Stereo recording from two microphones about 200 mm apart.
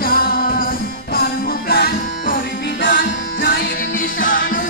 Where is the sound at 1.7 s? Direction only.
50° left (ahead or behind).